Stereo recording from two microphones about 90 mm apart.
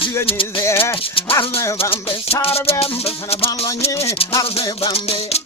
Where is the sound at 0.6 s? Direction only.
30° left (ahead or behind).